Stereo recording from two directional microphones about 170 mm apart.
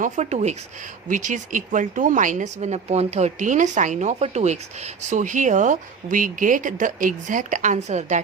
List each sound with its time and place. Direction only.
0.0 s a woman's voice: 40° right (ahead or behind)